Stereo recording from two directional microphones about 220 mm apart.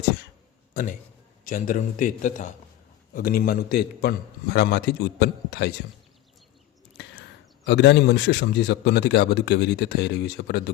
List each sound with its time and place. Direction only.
0.7 s a man's voice: 40° left (ahead or behind)
6.9 s speech: 50° left (ahead or behind)